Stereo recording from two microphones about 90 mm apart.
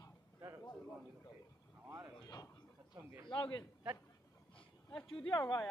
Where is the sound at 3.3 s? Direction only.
60° left (ahead or behind).